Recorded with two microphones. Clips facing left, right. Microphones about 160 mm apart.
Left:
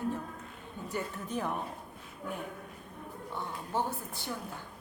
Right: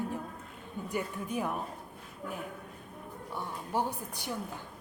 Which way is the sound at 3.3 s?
15° right (ahead or behind).